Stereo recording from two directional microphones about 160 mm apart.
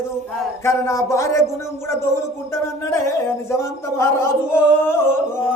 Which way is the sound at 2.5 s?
15° left (ahead or behind).